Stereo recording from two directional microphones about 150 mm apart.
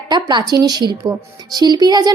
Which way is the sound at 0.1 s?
30° right (ahead or behind).